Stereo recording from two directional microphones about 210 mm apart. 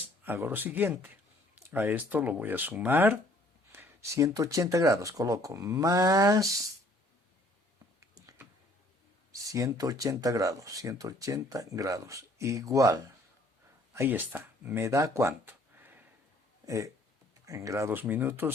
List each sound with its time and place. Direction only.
0.3 s speech: 10° right (ahead or behind)
8.1 s a sound: 15° right (ahead or behind)
9.3 s speech: 15° right (ahead or behind)